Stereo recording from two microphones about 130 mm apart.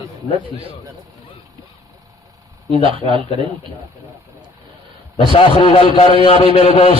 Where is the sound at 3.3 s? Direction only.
40° right (ahead or behind).